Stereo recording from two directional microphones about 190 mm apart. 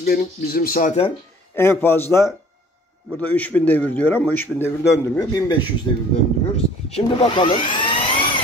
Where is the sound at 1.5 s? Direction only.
10° left (ahead or behind).